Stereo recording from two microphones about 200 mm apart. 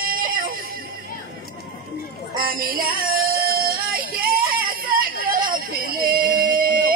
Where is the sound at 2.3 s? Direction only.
45° right (ahead or behind).